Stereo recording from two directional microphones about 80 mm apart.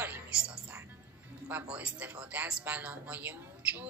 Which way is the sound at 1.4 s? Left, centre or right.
Centre.